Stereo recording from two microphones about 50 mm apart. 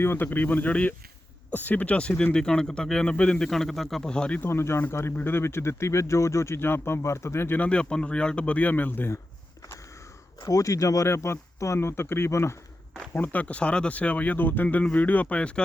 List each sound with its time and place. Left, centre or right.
0.0 s speech: left
0.3 s speech: left
2.3 s speech: centre
3.5 s speech: centre
4.1 s a man's voice: centre
4.4 s speech: left
6.6 s speech: left
7.6 s a man's voice: left
10.6 s speech: left
13.1 s a man's voice: left